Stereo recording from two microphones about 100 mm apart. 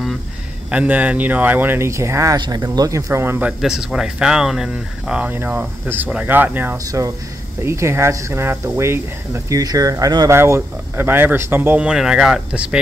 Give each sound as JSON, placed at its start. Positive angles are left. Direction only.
{"t": 0.7, "sound": "speech", "side_deg": -15}
{"t": 2.3, "sound": "speech", "side_deg": -40}
{"t": 3.3, "sound": "speech", "side_deg": -10}
{"t": 6.9, "sound": "speech", "side_deg": -35}
{"t": 9.6, "sound": "speech", "side_deg": -35}
{"t": 11.8, "sound": "speech", "side_deg": -10}